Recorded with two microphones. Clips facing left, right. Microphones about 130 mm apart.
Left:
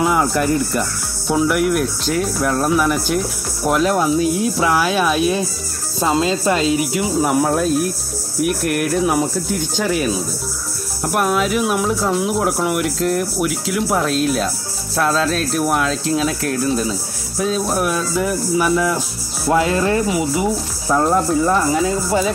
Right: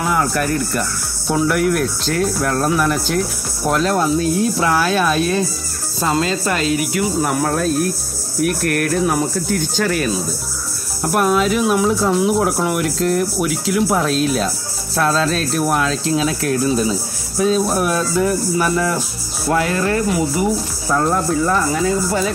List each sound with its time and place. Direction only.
0.0 s speech: 15° left (ahead or behind)
1.2 s speech: 5° left (ahead or behind)
6.1 s speech: 20° left (ahead or behind)
19.5 s speech: 20° left (ahead or behind)